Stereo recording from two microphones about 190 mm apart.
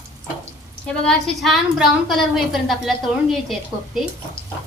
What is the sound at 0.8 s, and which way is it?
A woman's voice, 5° left (ahead or behind).